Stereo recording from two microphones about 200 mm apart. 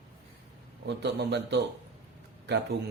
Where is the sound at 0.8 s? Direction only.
60° right (ahead or behind).